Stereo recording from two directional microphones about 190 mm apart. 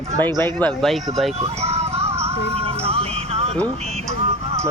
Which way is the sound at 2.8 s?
30° right (ahead or behind).